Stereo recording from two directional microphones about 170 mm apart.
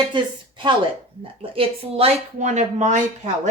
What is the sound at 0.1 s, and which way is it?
Speech, 30° right (ahead or behind).